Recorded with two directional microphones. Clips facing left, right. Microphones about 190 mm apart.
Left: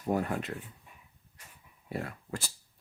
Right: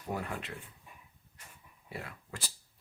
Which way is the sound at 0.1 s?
45° left (ahead or behind).